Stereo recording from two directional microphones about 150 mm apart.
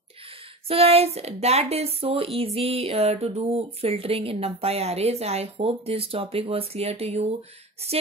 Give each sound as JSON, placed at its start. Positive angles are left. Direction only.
{"t": 0.3, "sound": "speech", "side_deg": -40}